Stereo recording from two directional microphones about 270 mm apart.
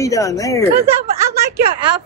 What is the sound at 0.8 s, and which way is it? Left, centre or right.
Speech, centre.